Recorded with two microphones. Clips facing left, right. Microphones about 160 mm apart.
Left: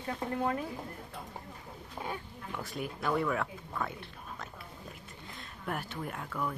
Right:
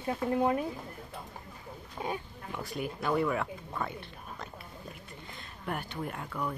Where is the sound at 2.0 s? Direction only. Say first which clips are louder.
Right 4 dB; 20° right (ahead or behind).